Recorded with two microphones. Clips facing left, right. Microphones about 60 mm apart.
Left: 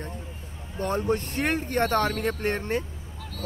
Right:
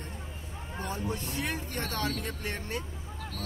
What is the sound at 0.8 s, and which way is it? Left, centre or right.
Speech, left.